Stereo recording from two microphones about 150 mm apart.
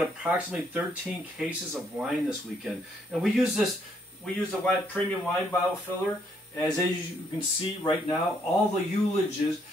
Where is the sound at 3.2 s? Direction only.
Centre (ahead or behind).